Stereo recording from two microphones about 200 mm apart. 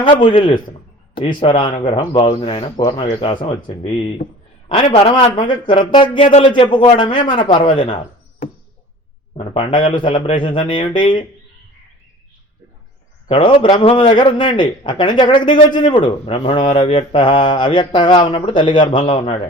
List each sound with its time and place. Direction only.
0.0 s a man's voice: 25° left (ahead or behind)
9.4 s a man's voice: 25° left (ahead or behind)
13.2 s a man's voice: 25° left (ahead or behind)